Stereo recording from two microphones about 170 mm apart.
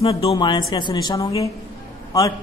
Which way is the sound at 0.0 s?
35° left (ahead or behind).